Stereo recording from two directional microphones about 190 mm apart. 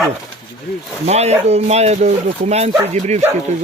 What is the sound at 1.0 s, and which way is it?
Speech, 35° right (ahead or behind).